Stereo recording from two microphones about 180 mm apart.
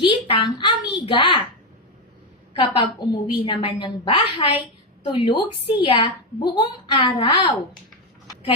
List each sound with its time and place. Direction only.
0.0 s a woman's voice: 25° left (ahead or behind)
2.5 s a woman's voice: 25° left (ahead or behind)